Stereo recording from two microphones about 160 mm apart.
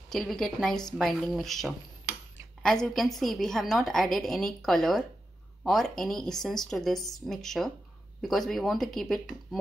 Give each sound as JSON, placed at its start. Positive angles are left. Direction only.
{"t": 0.1, "sound": "a woman's voice", "side_deg": 0}